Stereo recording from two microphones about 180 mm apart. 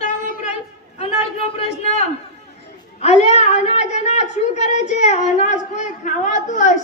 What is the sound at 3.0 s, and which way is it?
A woman's voice, 40° left (ahead or behind).